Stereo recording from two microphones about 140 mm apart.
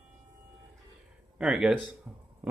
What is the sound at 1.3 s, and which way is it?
Speech, 5° right (ahead or behind).